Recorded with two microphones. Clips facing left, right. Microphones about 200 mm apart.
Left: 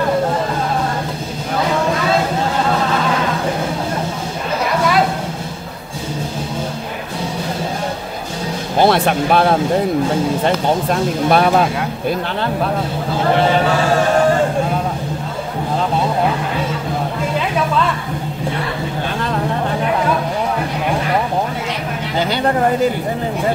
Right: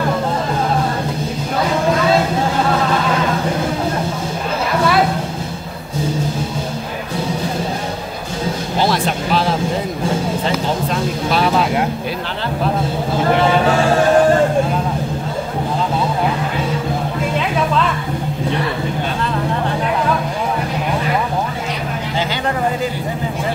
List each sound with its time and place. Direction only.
8.7 s speech: 60° left (ahead or behind)